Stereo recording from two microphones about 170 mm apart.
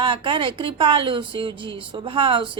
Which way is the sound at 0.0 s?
30° right (ahead or behind).